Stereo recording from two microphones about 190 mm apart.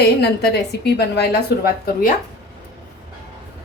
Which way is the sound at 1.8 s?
45° left (ahead or behind).